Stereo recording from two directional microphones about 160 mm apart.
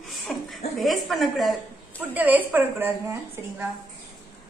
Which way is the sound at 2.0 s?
10° right (ahead or behind).